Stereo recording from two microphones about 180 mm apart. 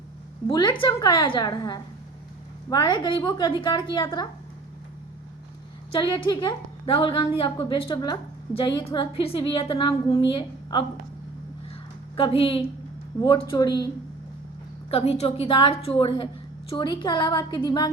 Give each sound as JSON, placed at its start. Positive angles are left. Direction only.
{"t": 0.4, "sound": "a woman's voice", "side_deg": 25}
{"t": 5.9, "sound": "a woman's voice", "side_deg": 25}
{"t": 12.1, "sound": "a woman's voice", "side_deg": 30}
{"t": 14.8, "sound": "a woman's voice", "side_deg": 35}